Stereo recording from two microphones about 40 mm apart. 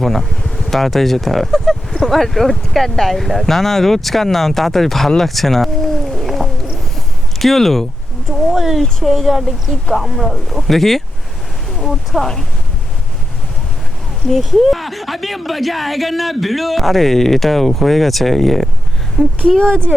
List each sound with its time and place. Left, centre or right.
0.0 s speech: centre
14.3 s speech: centre
19.1 s speech: centre